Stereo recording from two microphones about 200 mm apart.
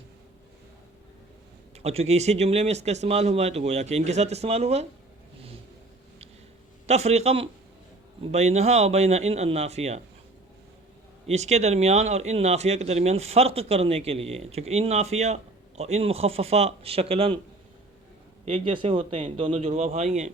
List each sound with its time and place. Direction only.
1.8 s speech: 30° right (ahead or behind)
6.8 s speech: 35° right (ahead or behind)
11.3 s a man's voice: 35° right (ahead or behind)
18.4 s speech: 30° right (ahead or behind)